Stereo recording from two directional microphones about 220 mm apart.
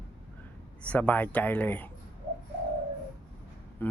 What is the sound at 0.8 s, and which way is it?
Speech, 5° left (ahead or behind).